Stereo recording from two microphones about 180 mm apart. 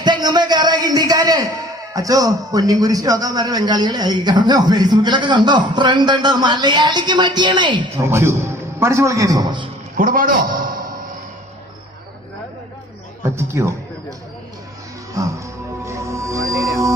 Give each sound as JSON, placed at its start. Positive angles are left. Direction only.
{"t": 0.0, "sound": "a sound", "side_deg": -25}
{"t": 1.9, "sound": "speech", "side_deg": -20}
{"t": 8.0, "sound": "a man's voice", "side_deg": -15}
{"t": 10.0, "sound": "a sound", "side_deg": -50}
{"t": 13.2, "sound": "a man's voice", "side_deg": -15}
{"t": 15.2, "sound": "speech", "side_deg": -20}
{"t": 15.8, "sound": "music", "side_deg": -15}